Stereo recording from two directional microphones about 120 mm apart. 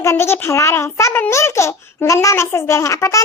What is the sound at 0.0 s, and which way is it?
A child's voice, 20° left (ahead or behind).